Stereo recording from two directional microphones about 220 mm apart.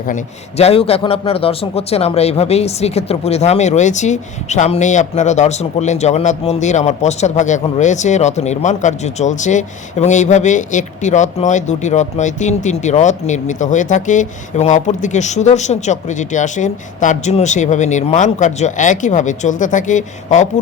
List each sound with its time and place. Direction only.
0.1 s a man's voice: 30° left (ahead or behind)